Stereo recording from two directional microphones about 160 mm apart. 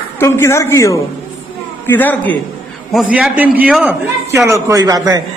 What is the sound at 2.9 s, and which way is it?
A man's voice, 5° right (ahead or behind).